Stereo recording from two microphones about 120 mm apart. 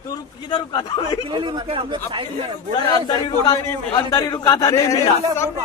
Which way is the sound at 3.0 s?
35° left (ahead or behind).